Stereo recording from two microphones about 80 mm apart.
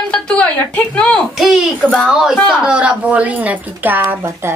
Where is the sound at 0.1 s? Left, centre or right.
Centre.